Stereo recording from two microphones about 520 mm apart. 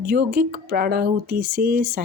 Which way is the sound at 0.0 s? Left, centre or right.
Centre.